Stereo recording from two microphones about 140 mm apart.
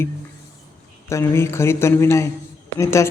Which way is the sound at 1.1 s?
20° left (ahead or behind).